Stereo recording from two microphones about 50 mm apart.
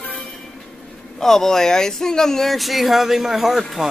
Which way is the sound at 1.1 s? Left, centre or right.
Centre.